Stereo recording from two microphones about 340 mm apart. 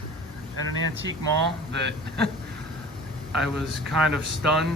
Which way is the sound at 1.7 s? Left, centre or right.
Right.